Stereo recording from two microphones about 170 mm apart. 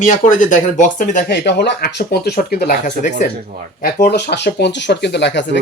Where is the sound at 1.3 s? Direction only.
90° left; by 3.2 s 50° left (ahead or behind).